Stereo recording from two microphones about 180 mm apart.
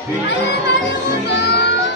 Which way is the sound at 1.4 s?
65° left (ahead or behind).